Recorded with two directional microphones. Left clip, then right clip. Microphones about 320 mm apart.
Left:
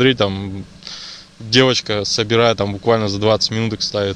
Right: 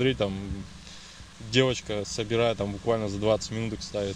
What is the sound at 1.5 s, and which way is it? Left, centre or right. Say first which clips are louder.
Speech: left 11 dB; left.